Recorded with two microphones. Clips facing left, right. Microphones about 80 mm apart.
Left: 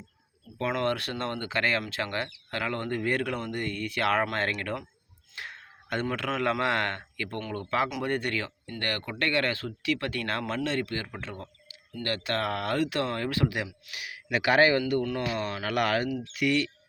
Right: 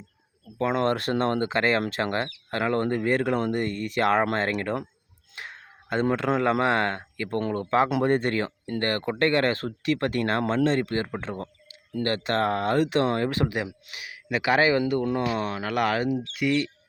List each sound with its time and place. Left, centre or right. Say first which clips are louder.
0.6 s speech: right 4 dB; right
14.3 s speech: right 1 dB; centre
16.4 s speech: right 1 dB; centre